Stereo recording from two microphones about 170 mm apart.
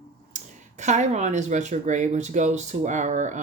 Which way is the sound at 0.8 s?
45° right (ahead or behind).